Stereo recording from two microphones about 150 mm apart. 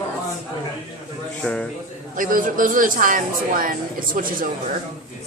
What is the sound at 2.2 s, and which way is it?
Speech, 65° right (ahead or behind).